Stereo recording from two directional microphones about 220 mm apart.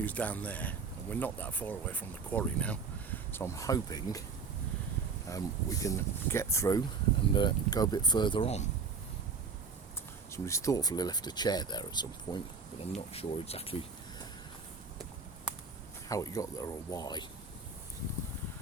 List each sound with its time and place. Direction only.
0.0 s speech: 5° left (ahead or behind)
5.3 s speech: 15° left (ahead or behind)
10.3 s speech: 15° left (ahead or behind)
16.0 s speech: 15° left (ahead or behind)